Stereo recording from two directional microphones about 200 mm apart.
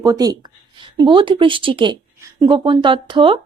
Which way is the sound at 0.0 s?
20° right (ahead or behind).